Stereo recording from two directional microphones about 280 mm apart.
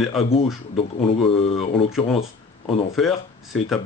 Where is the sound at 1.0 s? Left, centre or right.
Centre.